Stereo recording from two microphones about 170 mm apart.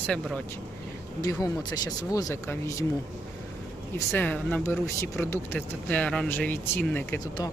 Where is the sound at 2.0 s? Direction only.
20° left (ahead or behind).